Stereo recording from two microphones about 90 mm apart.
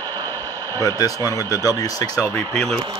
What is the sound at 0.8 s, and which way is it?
Speech, 35° left (ahead or behind).